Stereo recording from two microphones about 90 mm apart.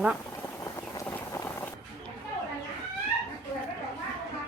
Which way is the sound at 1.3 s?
30° left (ahead or behind).